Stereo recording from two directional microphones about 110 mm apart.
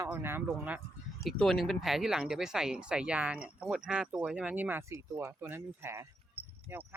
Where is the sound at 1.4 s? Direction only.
Centre (ahead or behind).